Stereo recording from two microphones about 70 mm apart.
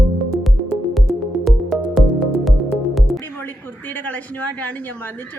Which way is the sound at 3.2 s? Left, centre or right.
Left.